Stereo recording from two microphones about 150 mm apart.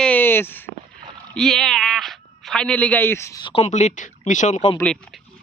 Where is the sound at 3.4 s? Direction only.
40° left (ahead or behind).